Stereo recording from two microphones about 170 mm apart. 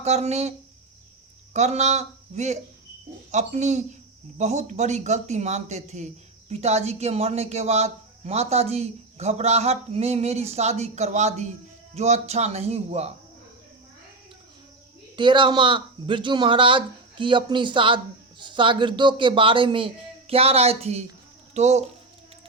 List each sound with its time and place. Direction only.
0.0 s a man's voice: 40° right (ahead or behind)
1.5 s a man's voice: 40° right (ahead or behind)
15.1 s a man's voice: 25° right (ahead or behind)